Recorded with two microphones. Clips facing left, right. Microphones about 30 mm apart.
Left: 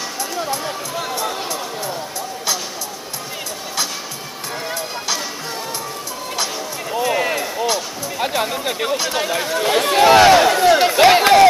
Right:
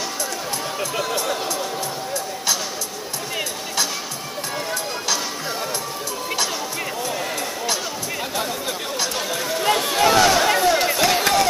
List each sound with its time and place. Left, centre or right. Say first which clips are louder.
4.6 s run: left 2 dB; centre
7.0 s a sound: left 11 dB; left
7.3 s basketball bounce: left 4 dB; centre
8.2 s speech: left 8 dB; left
10.6 s crowd: left 5 dB; left
11.0 s a sound: left 8 dB; left